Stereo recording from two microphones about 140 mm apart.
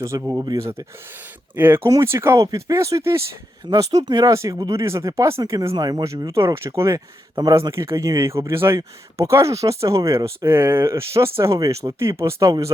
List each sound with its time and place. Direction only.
0.2 s speech: 10° right (ahead or behind)
0.4 s speech: 25° right (ahead or behind)